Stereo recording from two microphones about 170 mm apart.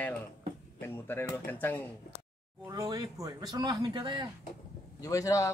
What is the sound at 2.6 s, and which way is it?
Speech, 25° right (ahead or behind).